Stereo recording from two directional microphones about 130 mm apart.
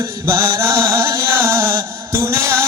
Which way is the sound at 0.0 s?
20° right (ahead or behind).